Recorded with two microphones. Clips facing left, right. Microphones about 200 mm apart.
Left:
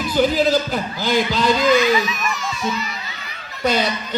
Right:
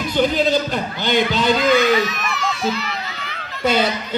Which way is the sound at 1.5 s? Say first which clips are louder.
Right 1 dB; 60° right (ahead or behind).